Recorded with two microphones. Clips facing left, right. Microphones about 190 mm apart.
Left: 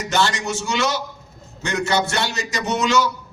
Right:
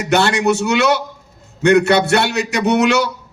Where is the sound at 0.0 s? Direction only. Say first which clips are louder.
Right 7 dB; 65° right (ahead or behind).